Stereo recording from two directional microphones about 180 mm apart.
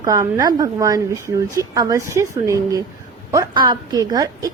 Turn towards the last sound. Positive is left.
turn(degrees=-20)  # may be behind; listen again after turning